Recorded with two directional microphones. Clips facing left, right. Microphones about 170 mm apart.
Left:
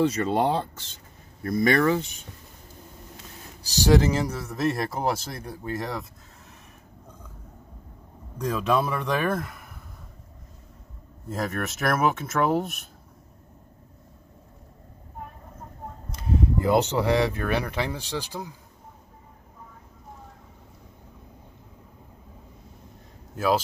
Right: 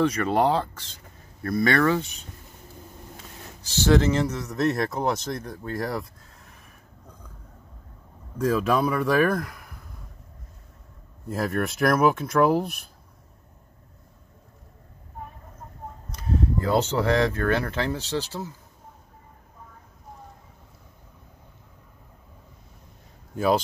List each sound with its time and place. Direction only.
0.1 s speech: 25° left (ahead or behind)
3.8 s speech: 10° left (ahead or behind)
8.4 s speech: centre (ahead or behind)
11.2 s speech: centre (ahead or behind)
16.1 s speech: 15° left (ahead or behind)
23.3 s speech: 5° left (ahead or behind)